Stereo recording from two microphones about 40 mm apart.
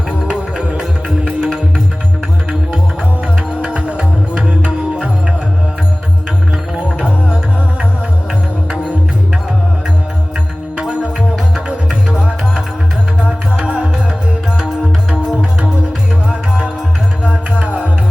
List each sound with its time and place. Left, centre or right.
0.3 s music: right
3.6 s music: right
6.7 s music: right
8.7 s music: right
10.8 s music: right
17.6 s music: right